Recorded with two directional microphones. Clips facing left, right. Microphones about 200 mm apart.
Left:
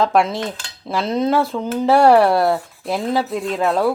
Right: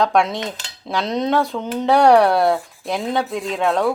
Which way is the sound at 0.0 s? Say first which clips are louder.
Left 1 dB; 5° left (ahead or behind).